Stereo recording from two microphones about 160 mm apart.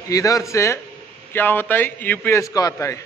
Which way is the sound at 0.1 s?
20° left (ahead or behind).